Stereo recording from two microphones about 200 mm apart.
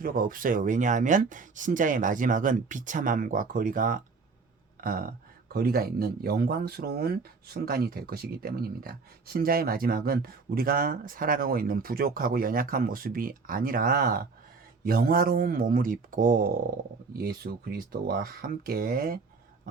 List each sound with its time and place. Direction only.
0.0 s speech: 45° right (ahead or behind)